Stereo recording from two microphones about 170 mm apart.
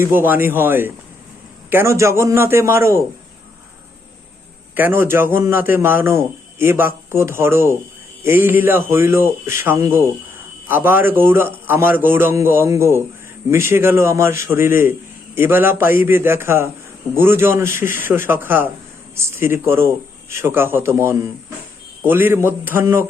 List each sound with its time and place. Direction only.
0.0 s a man's voice: 15° right (ahead or behind)
4.7 s a man's voice: 10° right (ahead or behind)